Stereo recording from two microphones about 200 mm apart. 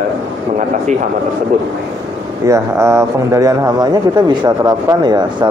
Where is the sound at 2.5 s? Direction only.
15° right (ahead or behind).